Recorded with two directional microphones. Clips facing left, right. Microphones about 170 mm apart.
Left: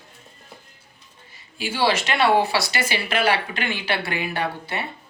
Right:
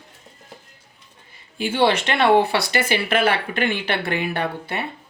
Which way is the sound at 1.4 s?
55° right (ahead or behind).